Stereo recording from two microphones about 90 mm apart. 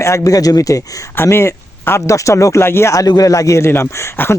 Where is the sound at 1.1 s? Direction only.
30° left (ahead or behind).